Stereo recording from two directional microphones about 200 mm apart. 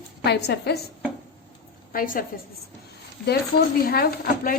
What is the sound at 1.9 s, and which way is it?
Speech, 45° left (ahead or behind).